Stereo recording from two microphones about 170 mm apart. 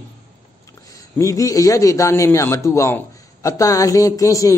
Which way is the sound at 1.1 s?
20° left (ahead or behind).